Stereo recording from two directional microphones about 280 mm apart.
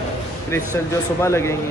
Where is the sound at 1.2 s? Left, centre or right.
Centre.